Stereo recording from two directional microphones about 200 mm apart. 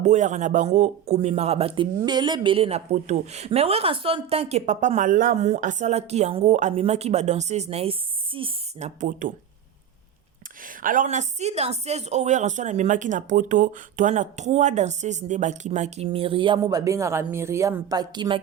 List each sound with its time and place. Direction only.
0.0 s a man's voice: 35° right (ahead or behind)
9.0 s a man's voice: 40° right (ahead or behind)
10.8 s a man's voice: 40° right (ahead or behind); by 18.3 s 20° right (ahead or behind)